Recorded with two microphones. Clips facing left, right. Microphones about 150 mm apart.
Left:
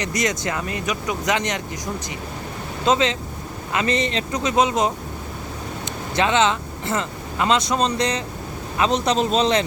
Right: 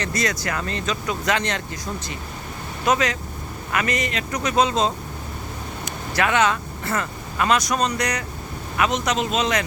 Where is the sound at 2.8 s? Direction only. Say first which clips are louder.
Left 2 dB; 25° left (ahead or behind).